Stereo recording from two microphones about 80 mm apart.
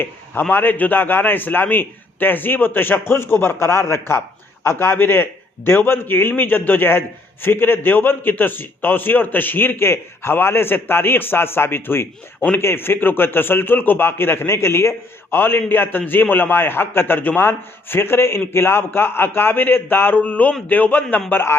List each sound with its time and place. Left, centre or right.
0.5 s a man's voice: left